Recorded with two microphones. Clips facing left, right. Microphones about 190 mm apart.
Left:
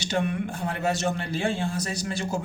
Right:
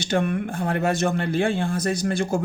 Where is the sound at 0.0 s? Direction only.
55° right (ahead or behind).